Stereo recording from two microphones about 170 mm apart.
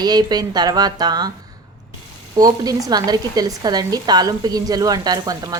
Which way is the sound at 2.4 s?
20° right (ahead or behind).